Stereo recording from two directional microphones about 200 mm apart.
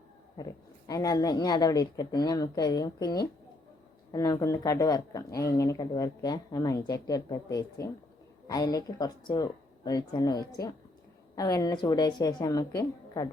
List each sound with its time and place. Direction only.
0.9 s speech: 20° left (ahead or behind)